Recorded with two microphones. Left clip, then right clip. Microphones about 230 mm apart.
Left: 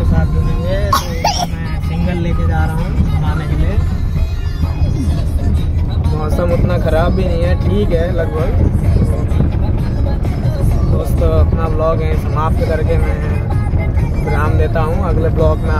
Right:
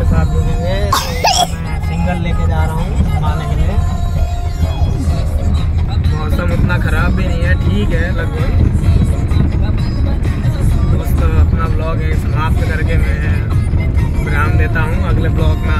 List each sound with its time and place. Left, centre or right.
0.8 s music: right